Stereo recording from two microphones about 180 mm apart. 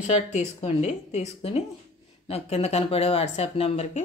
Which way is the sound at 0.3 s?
40° left (ahead or behind).